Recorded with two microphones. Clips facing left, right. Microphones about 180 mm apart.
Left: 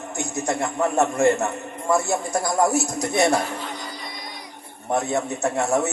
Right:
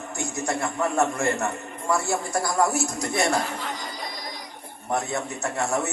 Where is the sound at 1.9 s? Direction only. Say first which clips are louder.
Left 3 dB; 20° left (ahead or behind).